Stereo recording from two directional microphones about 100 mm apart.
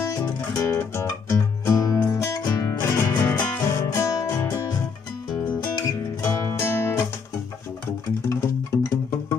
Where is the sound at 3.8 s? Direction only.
35° left (ahead or behind).